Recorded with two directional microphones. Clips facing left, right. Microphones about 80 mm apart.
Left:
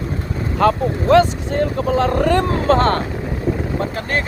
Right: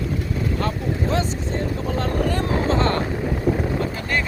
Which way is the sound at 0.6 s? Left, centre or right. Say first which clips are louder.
Left 8 dB; left.